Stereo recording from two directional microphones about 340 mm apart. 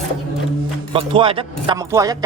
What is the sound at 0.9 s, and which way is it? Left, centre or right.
Speech, centre.